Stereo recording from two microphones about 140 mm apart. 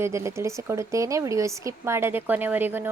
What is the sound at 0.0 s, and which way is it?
A woman's voice, 20° right (ahead or behind).